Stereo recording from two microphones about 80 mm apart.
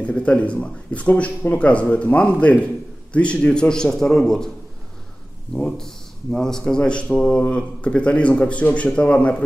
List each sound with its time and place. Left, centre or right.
0.0 s speech: centre
5.6 s speech: centre